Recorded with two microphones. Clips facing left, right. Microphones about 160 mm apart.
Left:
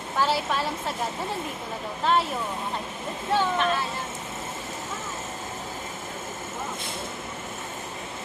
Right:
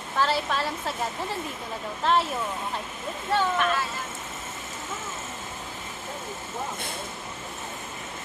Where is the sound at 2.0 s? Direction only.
Centre (ahead or behind).